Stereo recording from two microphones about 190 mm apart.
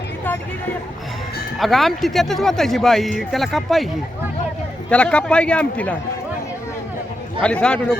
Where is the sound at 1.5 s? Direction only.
Centre (ahead or behind).